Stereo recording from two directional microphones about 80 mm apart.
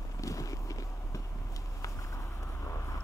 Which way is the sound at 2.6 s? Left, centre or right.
Left.